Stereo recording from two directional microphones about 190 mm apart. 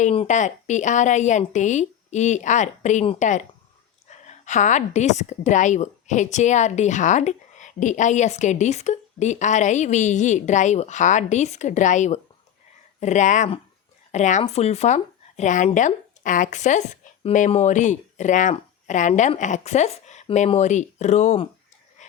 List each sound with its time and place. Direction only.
0.0 s a woman's voice: 35° left (ahead or behind)